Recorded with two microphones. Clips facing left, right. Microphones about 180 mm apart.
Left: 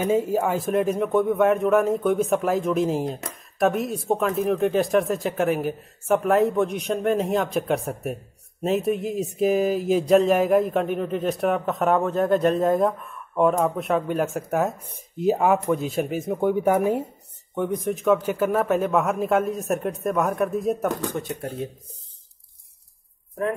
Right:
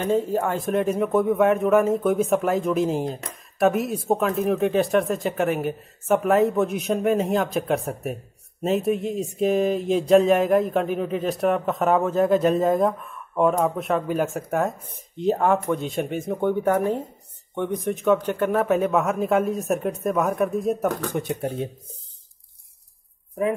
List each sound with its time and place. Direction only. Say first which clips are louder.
0.0 s speech: left 1 dB; 10° left (ahead or behind)
21.1 s speech: right 3 dB; 20° right (ahead or behind)